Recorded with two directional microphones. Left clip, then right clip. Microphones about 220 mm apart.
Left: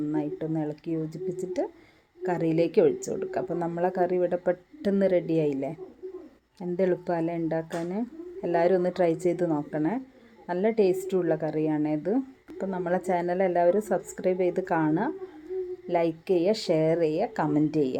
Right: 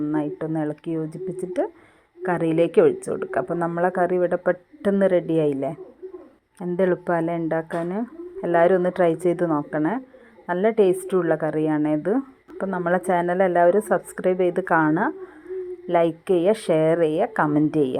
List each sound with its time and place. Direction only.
0.1 s a woman's voice: 10° right (ahead or behind)